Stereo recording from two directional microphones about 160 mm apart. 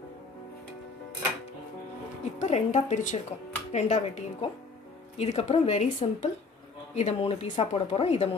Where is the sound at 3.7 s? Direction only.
50° left (ahead or behind).